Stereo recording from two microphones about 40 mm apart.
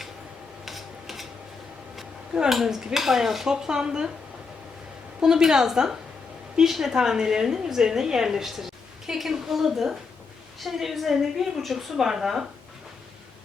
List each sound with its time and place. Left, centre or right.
0.6 s a sound: centre
2.5 s a woman's voice: centre
3.5 s speech: centre
5.2 s a woman's voice: centre